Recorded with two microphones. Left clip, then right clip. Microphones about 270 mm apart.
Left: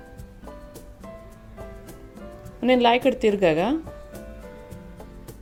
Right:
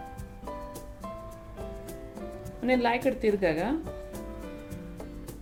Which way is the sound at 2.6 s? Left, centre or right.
Left.